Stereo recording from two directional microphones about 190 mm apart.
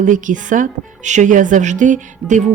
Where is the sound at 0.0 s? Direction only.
45° right (ahead or behind).